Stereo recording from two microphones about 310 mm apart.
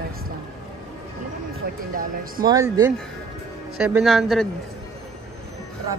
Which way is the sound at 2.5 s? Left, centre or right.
Centre.